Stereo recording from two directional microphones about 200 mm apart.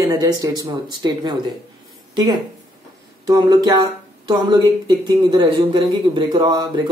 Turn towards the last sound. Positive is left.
turn(degrees=-20)  # may be behind; listen again after turning